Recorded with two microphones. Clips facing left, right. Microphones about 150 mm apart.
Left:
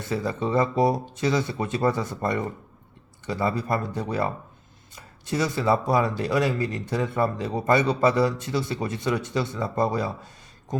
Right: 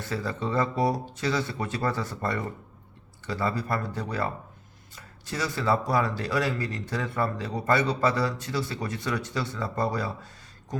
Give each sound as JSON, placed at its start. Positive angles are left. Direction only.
{"t": 0.0, "sound": "speech", "side_deg": 20}